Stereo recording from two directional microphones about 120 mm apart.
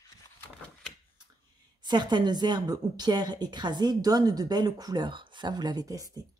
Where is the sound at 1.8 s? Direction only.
35° right (ahead or behind).